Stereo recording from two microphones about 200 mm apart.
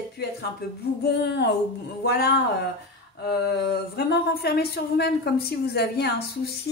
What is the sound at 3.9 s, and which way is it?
A woman's voice, 55° left (ahead or behind).